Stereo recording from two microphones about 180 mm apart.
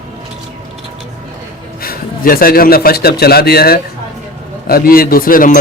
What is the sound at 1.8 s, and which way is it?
A man's voice, 55° left (ahead or behind).